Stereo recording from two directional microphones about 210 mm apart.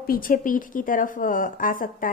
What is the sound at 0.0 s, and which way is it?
A woman's voice, 45° left (ahead or behind).